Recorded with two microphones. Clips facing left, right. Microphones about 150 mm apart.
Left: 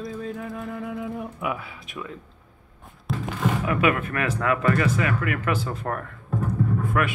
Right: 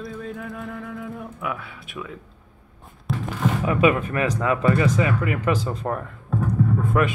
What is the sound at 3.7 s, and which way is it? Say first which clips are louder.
Speech: right 5 dB; 20° right (ahead or behind).